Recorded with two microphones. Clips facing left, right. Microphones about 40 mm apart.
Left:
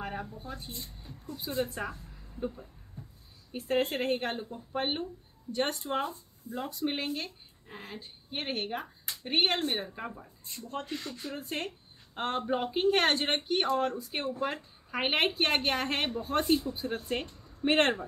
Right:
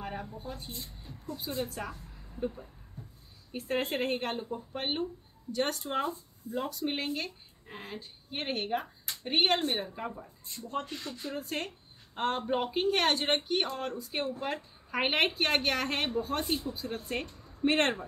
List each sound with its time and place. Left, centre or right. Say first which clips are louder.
0.0 s a sound: left 1 dB; centre
0.4 s a woman's voice: even; centre
12.4 s speech: even; centre
12.9 s speech: left 1 dB; left
13.3 s speech: left 1 dB; centre
17.4 s a sound: right 4 dB; centre
17.6 s speech: left 1 dB; centre